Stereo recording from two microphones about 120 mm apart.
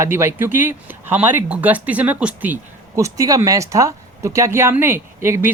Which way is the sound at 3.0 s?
30° right (ahead or behind).